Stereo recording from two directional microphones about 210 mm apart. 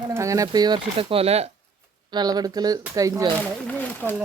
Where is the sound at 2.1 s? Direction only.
20° right (ahead or behind).